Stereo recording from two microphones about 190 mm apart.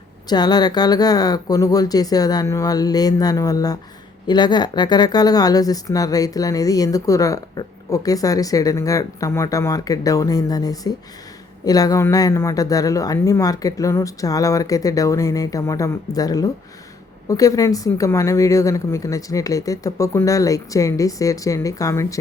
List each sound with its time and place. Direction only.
0.3 s speech: 20° left (ahead or behind)